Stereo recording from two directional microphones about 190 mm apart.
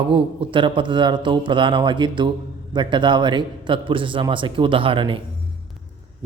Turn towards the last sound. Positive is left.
turn(degrees=-25)  # may be behind; listen again after turning